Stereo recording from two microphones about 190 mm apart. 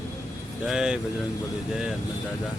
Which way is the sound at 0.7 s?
5° right (ahead or behind).